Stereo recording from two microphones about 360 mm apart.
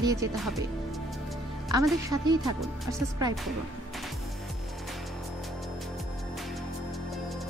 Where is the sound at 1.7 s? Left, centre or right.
Centre.